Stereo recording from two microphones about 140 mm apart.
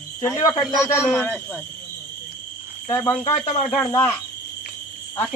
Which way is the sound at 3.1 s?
50° left (ahead or behind).